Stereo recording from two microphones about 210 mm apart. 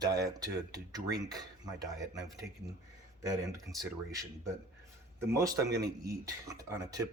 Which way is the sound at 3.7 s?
55° right (ahead or behind).